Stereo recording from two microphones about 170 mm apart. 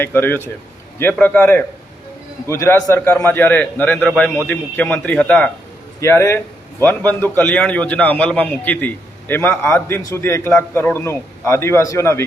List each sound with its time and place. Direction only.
0.0 s a man's voice: 15° left (ahead or behind)